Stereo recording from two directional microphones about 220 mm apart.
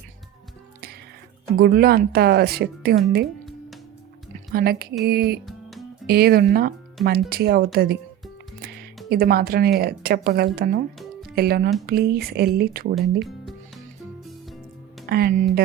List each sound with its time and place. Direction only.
1.5 s speech: 45° right (ahead or behind)
4.5 s speech: 45° right (ahead or behind)
9.0 s speech: 45° right (ahead or behind)
15.0 s speech: 45° right (ahead or behind)